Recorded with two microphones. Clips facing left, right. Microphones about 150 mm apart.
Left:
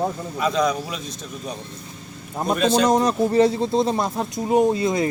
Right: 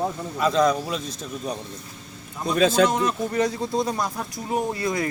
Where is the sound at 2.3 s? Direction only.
40° left (ahead or behind).